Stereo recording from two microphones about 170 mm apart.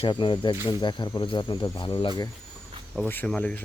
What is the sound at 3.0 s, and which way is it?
Speech, 10° left (ahead or behind).